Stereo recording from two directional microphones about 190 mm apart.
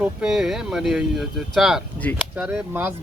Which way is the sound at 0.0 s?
5° right (ahead or behind).